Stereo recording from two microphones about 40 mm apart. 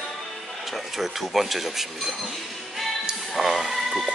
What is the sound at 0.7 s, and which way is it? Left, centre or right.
Speech, centre.